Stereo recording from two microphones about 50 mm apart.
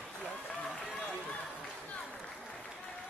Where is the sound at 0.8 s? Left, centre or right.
Left.